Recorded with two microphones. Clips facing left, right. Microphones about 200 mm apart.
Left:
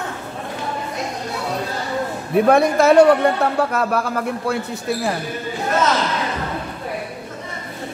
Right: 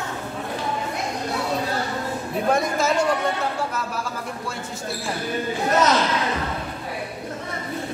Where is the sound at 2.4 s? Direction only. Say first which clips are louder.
Left 7 dB; 65° left (ahead or behind).